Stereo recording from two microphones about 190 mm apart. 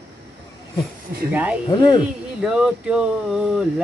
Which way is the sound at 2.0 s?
5° right (ahead or behind).